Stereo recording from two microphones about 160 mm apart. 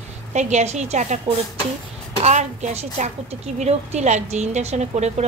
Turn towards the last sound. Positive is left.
turn(degrees=-45)  # may be behind; listen again after turning